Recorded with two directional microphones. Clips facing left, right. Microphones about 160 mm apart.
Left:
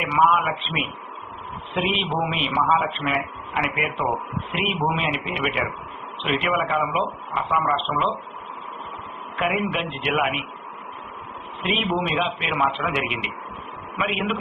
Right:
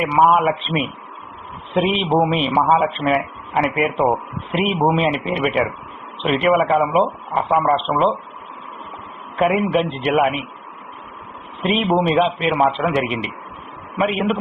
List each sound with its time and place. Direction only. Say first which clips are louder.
0.2 s a man's voice: right 5 dB; 40° right (ahead or behind)
9.3 s a man's voice: right 7 dB; 40° right (ahead or behind)
11.6 s a man's voice: right 7 dB; 35° right (ahead or behind)